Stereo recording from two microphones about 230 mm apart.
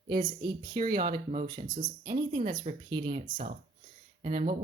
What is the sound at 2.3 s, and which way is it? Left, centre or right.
Speech, right.